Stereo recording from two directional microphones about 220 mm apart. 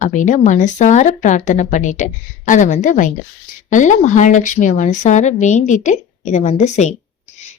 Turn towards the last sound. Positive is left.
turn(degrees=30)  # may be behind; listen again after turning